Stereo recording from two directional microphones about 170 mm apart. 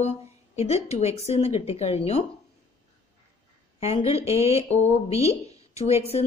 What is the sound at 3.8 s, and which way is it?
Speech, 35° left (ahead or behind).